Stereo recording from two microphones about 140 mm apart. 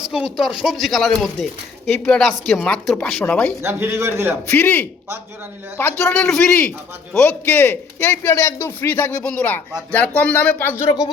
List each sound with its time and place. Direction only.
0.1 s a man's voice: 5° right (ahead or behind)
3.6 s a man's voice: 15° right (ahead or behind)
4.4 s a man's voice: 15° left (ahead or behind)
6.3 s a man's voice: 5° left (ahead or behind); by 11.1 s 25° left (ahead or behind)